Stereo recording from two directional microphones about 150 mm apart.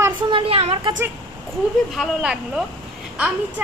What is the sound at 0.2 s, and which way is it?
Speech, 35° right (ahead or behind).